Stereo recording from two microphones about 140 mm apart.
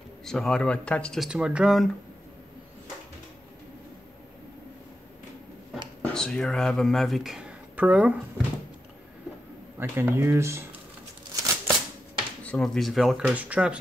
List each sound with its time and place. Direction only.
0.2 s speech: 5° left (ahead or behind)
6.0 s speech: 5° left (ahead or behind); by 8.2 s 10° right (ahead or behind)
9.8 s speech: 15° right (ahead or behind)
11.3 s a sound: 25° right (ahead or behind)
12.4 s speech: 5° left (ahead or behind)